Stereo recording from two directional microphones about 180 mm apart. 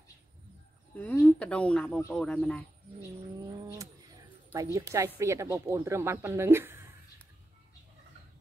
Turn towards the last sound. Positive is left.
turn(degrees=-15)  # may be behind; listen again after turning